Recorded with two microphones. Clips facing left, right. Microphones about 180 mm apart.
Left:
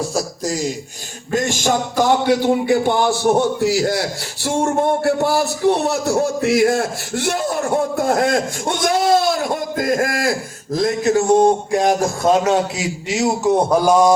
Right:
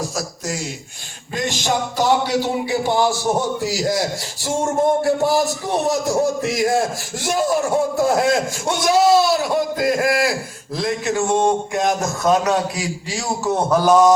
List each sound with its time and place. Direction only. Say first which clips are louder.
0.4 s speech: left 6 dB; 35° left (ahead or behind)
1.3 s a man's voice: left 4 dB; 45° left (ahead or behind); by 14.1 s 10° left (ahead or behind)